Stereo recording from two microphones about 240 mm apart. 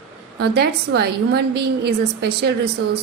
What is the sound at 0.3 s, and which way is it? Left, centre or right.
A woman's voice, right.